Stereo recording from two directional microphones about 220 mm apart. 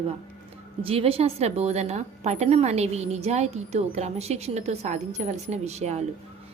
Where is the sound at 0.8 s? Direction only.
25° right (ahead or behind).